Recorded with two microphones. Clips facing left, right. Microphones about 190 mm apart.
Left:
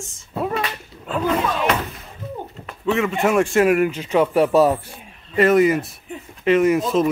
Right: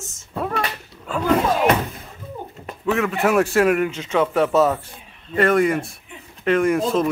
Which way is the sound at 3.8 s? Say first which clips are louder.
Left 3 dB; 25° right (ahead or behind).